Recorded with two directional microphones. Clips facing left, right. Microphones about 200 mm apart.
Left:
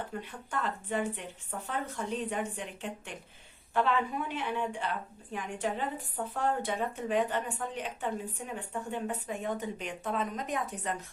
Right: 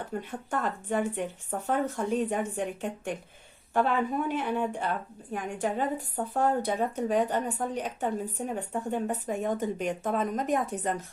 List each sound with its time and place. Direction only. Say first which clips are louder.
0.2 s speech: right 7 dB; 45° right (ahead or behind)